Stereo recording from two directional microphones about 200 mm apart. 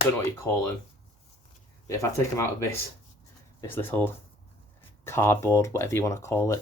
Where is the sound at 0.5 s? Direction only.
10° left (ahead or behind).